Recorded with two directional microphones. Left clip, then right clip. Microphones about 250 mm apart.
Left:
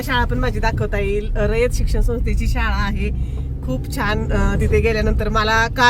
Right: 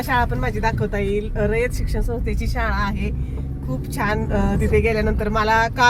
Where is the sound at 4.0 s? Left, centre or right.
Centre.